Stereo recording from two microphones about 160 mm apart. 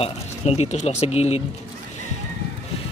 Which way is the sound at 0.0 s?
40° left (ahead or behind).